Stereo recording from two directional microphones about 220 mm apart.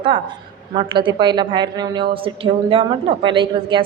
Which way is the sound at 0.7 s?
20° right (ahead or behind).